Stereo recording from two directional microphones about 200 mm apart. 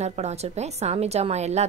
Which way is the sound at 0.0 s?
35° right (ahead or behind).